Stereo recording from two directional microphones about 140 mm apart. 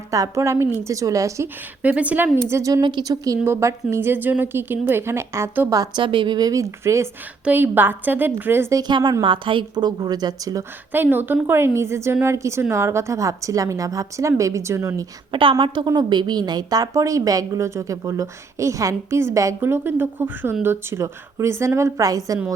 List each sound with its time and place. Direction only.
0.1 s a woman's voice: 25° right (ahead or behind)
1.8 s a woman's voice: 10° right (ahead or behind)
8.8 s a woman's voice: 35° right (ahead or behind)
10.9 s a woman's voice: 15° right (ahead or behind)
15.3 s a woman's voice: 35° right (ahead or behind)